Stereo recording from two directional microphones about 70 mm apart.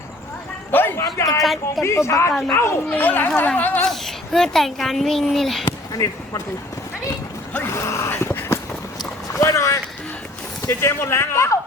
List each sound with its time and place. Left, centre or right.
0.7 s a sound: left
0.9 s a sound: left
1.4 s speech: centre
1.8 s speech: left
2.9 s speech: left
3.8 s speech: centre
5.9 s speech: left
7.7 s a sound: left
9.4 s speech: left